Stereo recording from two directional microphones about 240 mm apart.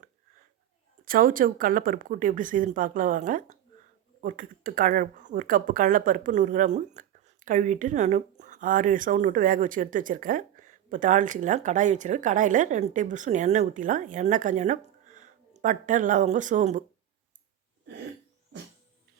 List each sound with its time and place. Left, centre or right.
1.0 s speech: right